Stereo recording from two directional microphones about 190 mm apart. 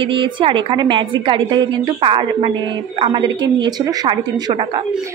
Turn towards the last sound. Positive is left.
turn(degrees=-25)  # may be behind; listen again after turning